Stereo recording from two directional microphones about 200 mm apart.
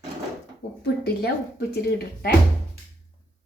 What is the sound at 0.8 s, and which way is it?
Speech, 55° left (ahead or behind).